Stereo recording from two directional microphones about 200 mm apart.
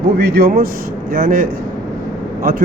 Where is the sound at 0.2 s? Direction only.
50° right (ahead or behind).